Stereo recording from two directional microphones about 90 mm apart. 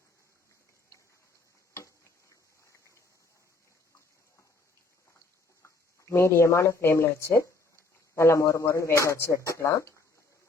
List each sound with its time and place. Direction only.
5.6 s speech: 30° left (ahead or behind)